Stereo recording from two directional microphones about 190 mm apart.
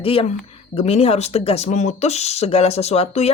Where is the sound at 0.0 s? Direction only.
30° left (ahead or behind).